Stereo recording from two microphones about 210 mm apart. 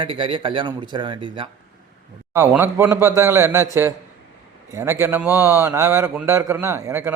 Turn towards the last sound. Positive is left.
turn(degrees=-10)  # may be behind; listen again after turning